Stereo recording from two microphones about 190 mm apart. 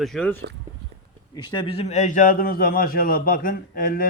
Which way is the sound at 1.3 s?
25° left (ahead or behind).